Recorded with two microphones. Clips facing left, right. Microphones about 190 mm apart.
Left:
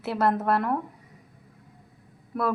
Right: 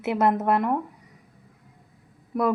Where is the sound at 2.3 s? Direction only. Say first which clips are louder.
Right 4 dB; 10° right (ahead or behind).